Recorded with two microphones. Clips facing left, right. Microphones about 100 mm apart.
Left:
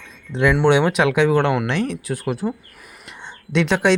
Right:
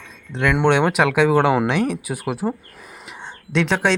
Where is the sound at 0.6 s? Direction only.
Centre (ahead or behind).